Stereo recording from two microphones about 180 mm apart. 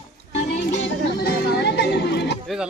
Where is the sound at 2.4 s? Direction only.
Centre (ahead or behind).